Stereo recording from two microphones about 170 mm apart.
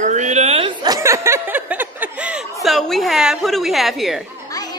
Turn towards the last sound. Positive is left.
turn(degrees=0)  # may be behind; listen again after turning